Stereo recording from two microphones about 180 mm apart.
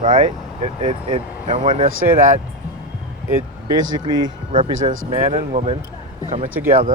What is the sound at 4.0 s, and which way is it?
Speech, 25° right (ahead or behind).